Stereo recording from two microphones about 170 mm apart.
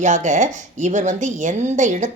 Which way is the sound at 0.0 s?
45° right (ahead or behind).